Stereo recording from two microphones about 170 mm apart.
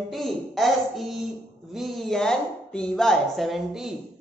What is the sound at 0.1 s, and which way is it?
Speech, centre (ahead or behind).